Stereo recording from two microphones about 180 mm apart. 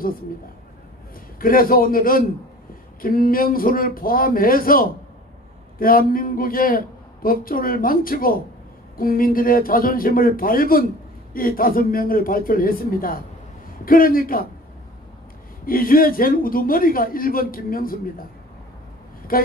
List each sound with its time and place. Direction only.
1.4 s a man's voice: 50° left (ahead or behind)
15.6 s a man's voice: 50° left (ahead or behind)
19.3 s a man's voice: 55° left (ahead or behind)